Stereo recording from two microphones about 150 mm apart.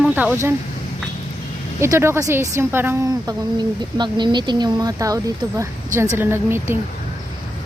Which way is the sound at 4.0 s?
30° right (ahead or behind).